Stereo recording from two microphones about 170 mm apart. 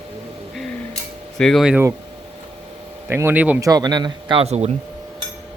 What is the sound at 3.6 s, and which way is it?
Speech, 20° right (ahead or behind).